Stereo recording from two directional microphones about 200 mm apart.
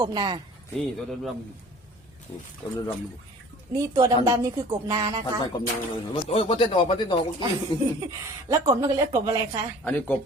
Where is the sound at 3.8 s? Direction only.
20° right (ahead or behind).